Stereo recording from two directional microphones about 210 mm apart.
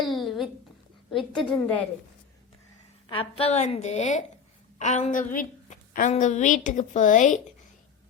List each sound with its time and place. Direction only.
0.1 s a sound: centre (ahead or behind)
1.1 s a woman's voice: 5° left (ahead or behind)
3.1 s a woman's voice: 25° left (ahead or behind)